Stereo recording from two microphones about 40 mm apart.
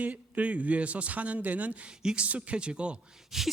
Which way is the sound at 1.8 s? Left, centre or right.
Right.